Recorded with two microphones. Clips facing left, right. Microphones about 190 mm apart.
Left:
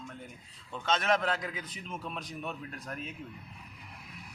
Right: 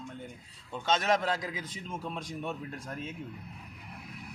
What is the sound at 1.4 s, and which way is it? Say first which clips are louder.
A man's voice: right 1 dB; 25° right (ahead or behind).